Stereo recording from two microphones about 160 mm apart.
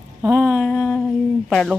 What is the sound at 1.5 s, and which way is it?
Speech, centre (ahead or behind).